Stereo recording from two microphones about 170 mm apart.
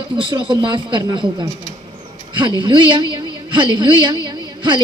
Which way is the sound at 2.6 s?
25° right (ahead or behind).